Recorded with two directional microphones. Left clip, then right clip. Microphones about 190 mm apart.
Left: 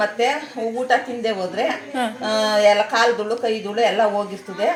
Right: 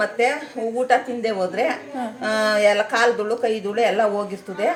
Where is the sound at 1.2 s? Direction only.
Centre (ahead or behind).